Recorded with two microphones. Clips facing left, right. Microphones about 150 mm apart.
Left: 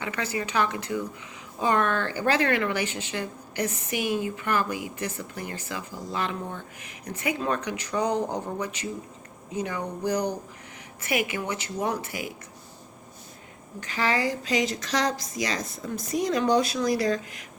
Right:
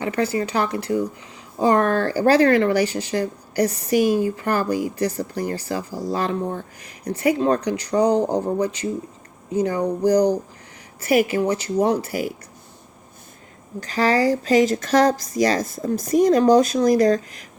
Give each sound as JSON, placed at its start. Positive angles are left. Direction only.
{"t": 0.0, "sound": "speech", "side_deg": -30}
{"t": 13.7, "sound": "a woman's voice", "side_deg": -40}